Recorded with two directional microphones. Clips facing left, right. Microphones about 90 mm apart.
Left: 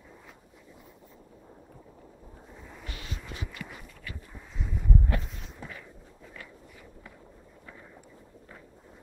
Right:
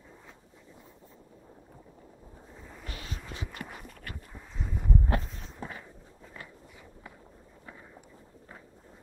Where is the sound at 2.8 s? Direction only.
40° right (ahead or behind).